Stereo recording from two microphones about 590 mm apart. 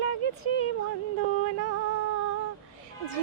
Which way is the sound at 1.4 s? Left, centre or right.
Centre.